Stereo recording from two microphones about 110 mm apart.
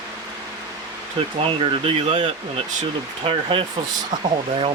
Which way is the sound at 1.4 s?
55° right (ahead or behind).